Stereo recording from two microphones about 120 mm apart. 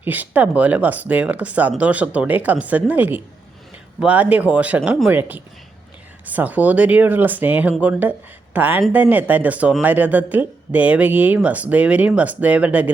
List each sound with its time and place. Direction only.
0.0 s speech: 15° right (ahead or behind)